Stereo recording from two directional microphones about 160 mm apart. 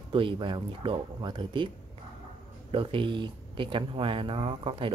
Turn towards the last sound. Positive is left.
turn(degrees=-30)  # may be behind; listen again after turning